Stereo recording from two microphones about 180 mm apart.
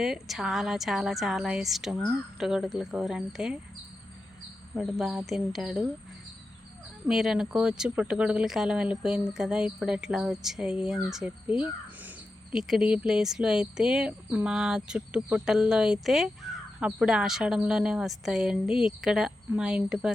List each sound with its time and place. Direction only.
0.0 s speech: 5° right (ahead or behind)
4.7 s speech: 5° right (ahead or behind)
7.1 s speech: 5° right (ahead or behind)
11.4 s speech: 30° left (ahead or behind)
12.0 s speech: 5° right (ahead or behind)